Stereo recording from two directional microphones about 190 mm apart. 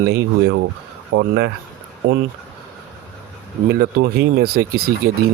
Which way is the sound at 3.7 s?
55° right (ahead or behind).